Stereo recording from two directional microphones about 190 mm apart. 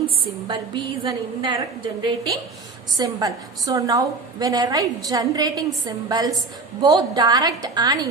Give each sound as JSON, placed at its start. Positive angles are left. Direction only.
{"t": 0.4, "sound": "a woman's voice", "side_deg": -25}